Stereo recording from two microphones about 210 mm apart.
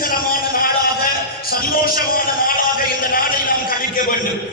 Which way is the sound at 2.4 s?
40° left (ahead or behind).